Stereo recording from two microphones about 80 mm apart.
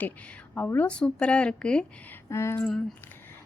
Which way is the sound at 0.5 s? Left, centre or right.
Left.